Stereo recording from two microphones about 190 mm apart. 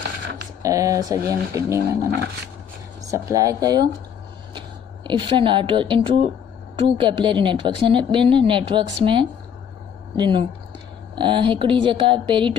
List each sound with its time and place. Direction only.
0.6 s speech: 15° right (ahead or behind)
3.1 s speech: 15° right (ahead or behind)